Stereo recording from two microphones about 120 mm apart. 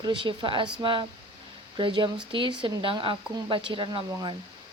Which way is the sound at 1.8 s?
40° right (ahead or behind).